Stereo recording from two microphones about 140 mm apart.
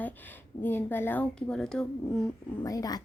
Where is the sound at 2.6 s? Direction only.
25° left (ahead or behind).